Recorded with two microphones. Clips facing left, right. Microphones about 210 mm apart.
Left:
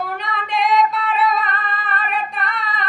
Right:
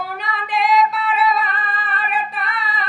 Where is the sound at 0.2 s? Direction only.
Centre (ahead or behind).